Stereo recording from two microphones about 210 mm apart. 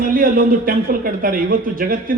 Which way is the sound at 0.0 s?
40° right (ahead or behind).